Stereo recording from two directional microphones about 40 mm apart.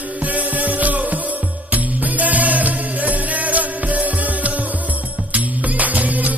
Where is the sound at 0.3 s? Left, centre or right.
Right.